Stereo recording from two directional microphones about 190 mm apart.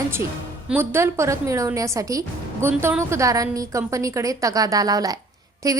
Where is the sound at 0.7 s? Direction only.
10° right (ahead or behind).